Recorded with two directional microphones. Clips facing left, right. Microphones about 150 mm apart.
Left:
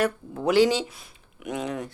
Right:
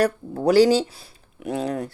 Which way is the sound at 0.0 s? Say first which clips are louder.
Right 4 dB; 35° right (ahead or behind).